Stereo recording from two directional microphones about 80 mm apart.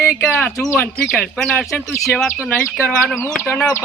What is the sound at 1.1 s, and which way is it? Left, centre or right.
Speech, centre.